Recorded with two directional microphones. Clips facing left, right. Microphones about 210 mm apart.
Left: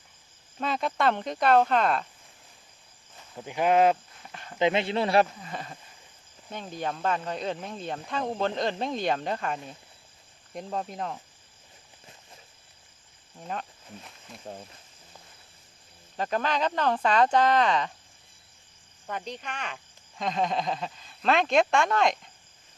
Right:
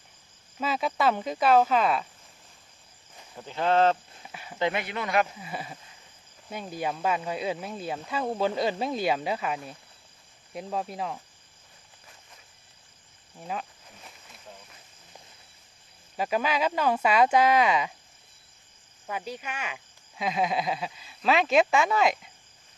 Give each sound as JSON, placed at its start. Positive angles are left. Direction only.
{"t": 0.6, "sound": "speech", "side_deg": -5}
{"t": 3.4, "sound": "speech", "side_deg": 15}
{"t": 4.3, "sound": "a sound", "side_deg": -5}
{"t": 4.5, "sound": "speech", "side_deg": 20}
{"t": 5.4, "sound": "speech", "side_deg": -10}
{"t": 13.4, "sound": "speech", "side_deg": -5}
{"t": 14.4, "sound": "speech", "side_deg": 45}
{"t": 16.1, "sound": "speech", "side_deg": -10}
{"t": 19.0, "sound": "speech", "side_deg": -5}